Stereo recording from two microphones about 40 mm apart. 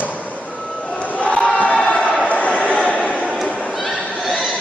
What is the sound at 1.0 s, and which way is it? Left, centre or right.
Crowd, left.